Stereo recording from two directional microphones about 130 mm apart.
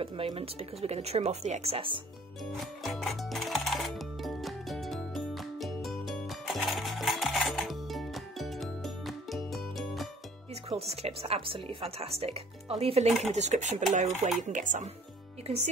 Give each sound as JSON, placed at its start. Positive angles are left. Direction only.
{"t": 0.0, "sound": "speech", "side_deg": -45}
{"t": 2.5, "sound": "music", "side_deg": 0}
{"t": 10.7, "sound": "speech", "side_deg": -50}
{"t": 15.4, "sound": "speech", "side_deg": -55}